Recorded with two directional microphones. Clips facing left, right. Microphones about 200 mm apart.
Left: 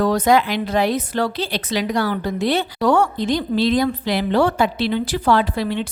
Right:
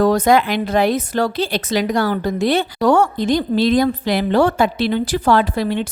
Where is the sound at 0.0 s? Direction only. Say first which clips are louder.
Right 2 dB; 45° right (ahead or behind).